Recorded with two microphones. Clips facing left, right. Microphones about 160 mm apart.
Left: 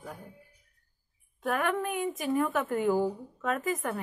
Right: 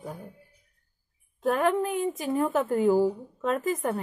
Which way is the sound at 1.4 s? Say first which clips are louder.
Right 5 dB; 30° right (ahead or behind).